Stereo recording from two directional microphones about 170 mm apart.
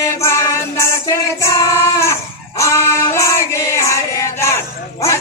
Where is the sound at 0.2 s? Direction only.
15° left (ahead or behind).